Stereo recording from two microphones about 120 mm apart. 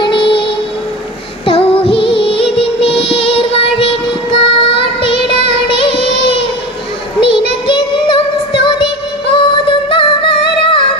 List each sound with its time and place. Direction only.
0.0 s music: 45° left (ahead or behind)
1.5 s music: 50° left (ahead or behind)
7.2 s child singing: 45° left (ahead or behind)
8.6 s music: 45° left (ahead or behind)